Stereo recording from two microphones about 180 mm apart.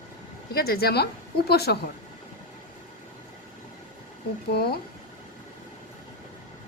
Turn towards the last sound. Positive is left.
turn(degrees=60)  # may be behind; listen again after turning